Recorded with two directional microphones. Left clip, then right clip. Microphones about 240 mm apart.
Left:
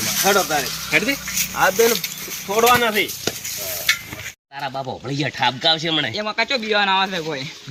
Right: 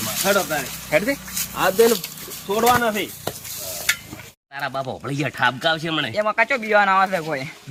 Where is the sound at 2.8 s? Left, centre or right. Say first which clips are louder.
Left 3 dB; centre.